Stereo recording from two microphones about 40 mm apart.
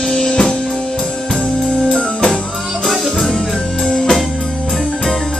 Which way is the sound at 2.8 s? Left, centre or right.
Centre.